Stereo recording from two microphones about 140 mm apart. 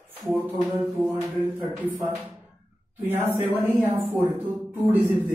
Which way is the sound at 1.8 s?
10° right (ahead or behind).